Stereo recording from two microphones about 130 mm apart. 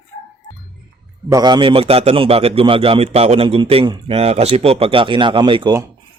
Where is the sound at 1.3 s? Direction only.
35° right (ahead or behind).